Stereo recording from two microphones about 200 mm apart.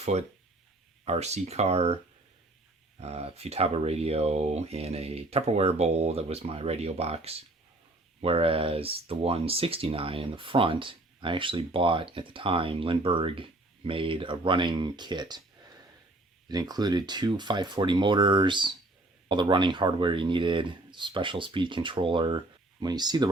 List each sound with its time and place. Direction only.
0.0 s speech: 35° right (ahead or behind)
3.0 s speech: 30° right (ahead or behind)
16.5 s speech: 20° right (ahead or behind)